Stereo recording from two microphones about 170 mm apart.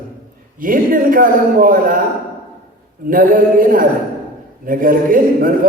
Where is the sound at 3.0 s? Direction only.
55° right (ahead or behind).